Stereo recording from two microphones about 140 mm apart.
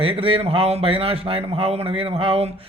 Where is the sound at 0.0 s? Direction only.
40° right (ahead or behind).